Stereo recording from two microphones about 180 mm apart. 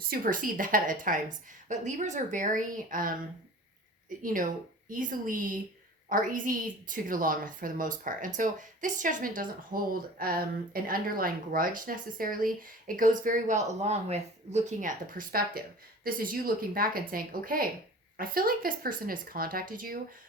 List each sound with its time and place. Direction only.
0.1 s a woman's voice: 50° right (ahead or behind)
4.2 s a woman's voice: 50° right (ahead or behind)